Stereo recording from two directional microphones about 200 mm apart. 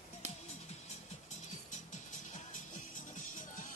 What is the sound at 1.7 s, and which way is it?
Music, 40° left (ahead or behind).